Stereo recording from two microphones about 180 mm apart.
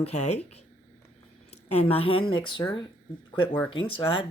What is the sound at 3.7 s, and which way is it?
Speech, 30° left (ahead or behind).